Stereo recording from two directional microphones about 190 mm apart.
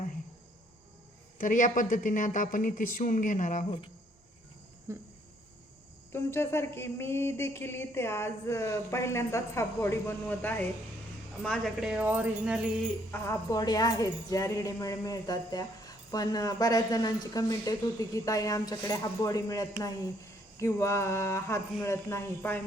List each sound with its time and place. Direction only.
1.4 s speech: 45° left (ahead or behind)
4.9 s cricket: 15° right (ahead or behind)
6.1 s speech: 10° left (ahead or behind); by 12.5 s 10° right (ahead or behind)
13.1 s speech: 15° left (ahead or behind)